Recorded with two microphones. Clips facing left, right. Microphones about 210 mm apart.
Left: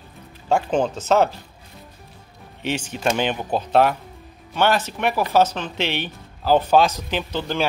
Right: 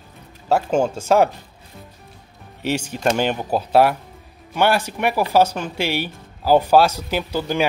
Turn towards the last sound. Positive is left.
turn(degrees=-10)  # may be behind; listen again after turning